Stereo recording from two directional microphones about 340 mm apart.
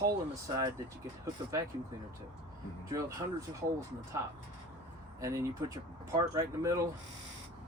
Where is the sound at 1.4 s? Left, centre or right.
Centre.